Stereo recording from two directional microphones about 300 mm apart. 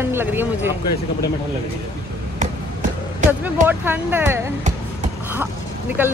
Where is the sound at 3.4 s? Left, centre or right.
Centre.